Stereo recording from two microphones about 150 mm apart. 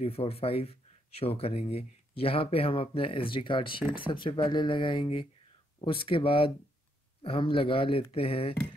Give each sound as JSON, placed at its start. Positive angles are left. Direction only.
{"t": 0.0, "sound": "speech", "side_deg": 40}